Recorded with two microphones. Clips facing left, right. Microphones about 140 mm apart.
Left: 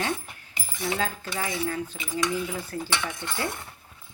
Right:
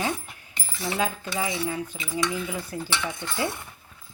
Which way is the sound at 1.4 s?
10° right (ahead or behind).